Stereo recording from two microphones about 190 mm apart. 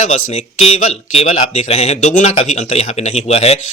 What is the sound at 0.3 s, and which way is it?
Speech, 30° left (ahead or behind).